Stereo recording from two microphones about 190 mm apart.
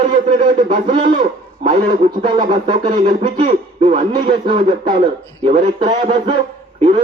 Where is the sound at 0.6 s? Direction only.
45° right (ahead or behind).